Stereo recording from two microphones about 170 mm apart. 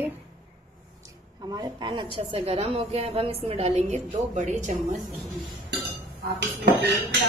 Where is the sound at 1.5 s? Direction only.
25° right (ahead or behind); by 4.9 s 45° right (ahead or behind).